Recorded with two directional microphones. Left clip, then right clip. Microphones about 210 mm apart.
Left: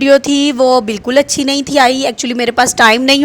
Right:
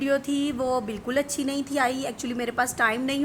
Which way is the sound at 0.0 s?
45° left (ahead or behind).